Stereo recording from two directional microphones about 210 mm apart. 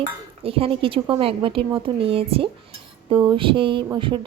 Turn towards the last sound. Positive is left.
turn(degrees=-25)  # may be behind; listen again after turning